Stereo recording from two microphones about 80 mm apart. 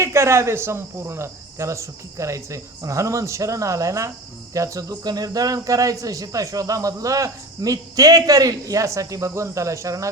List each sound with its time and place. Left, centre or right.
0.0 s speech: right